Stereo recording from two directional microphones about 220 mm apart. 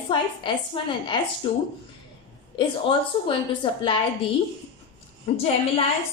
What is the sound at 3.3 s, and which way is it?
Speech, 20° left (ahead or behind).